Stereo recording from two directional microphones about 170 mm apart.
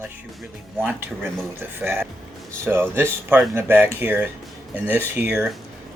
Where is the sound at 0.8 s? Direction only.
10° right (ahead or behind).